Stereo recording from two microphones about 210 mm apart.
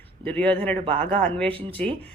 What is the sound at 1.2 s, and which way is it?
Speech, 5° left (ahead or behind).